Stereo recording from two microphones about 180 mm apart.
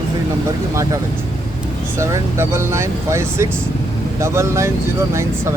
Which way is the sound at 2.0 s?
15° right (ahead or behind).